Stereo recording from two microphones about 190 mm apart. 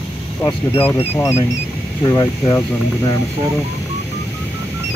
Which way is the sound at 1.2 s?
15° left (ahead or behind).